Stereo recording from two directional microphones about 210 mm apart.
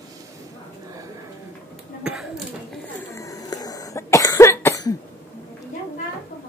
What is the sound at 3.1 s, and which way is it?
Cough, 15° left (ahead or behind).